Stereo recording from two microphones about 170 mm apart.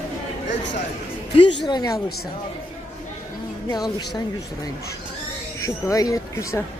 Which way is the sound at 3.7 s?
25° left (ahead or behind).